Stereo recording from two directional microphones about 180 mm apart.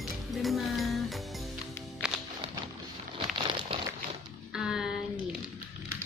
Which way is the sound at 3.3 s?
30° right (ahead or behind).